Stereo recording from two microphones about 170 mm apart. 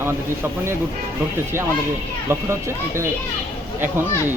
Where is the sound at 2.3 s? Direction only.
15° right (ahead or behind).